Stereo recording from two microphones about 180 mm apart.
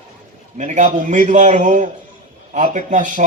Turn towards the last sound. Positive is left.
turn(degrees=-45)  # may be behind; listen again after turning